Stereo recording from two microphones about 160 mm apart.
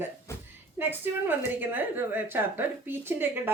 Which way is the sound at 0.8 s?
10° right (ahead or behind).